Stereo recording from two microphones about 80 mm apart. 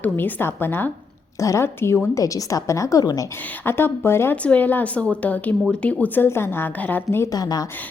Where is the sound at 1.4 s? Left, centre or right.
Left.